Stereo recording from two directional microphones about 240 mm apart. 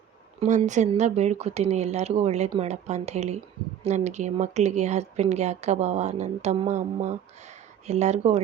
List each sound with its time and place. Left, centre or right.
0.3 s speech: right